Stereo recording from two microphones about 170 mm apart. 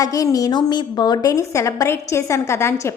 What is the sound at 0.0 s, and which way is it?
A woman's voice, 20° left (ahead or behind).